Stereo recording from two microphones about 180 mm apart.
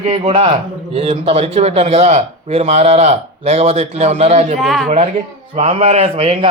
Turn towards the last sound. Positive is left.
turn(degrees=-35)  # may be behind; listen again after turning